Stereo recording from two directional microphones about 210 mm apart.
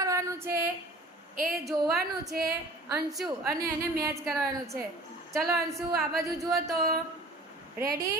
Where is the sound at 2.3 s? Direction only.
45° right (ahead or behind).